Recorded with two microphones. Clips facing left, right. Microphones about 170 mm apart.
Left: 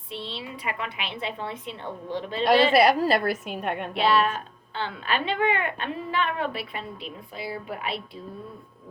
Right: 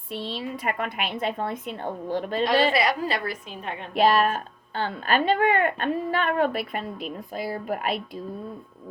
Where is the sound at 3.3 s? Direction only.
60° left (ahead or behind).